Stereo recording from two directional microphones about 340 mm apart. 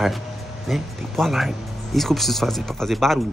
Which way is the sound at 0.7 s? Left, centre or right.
Centre.